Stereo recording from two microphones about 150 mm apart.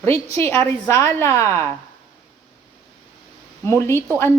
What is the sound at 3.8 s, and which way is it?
Speech, 20° left (ahead or behind).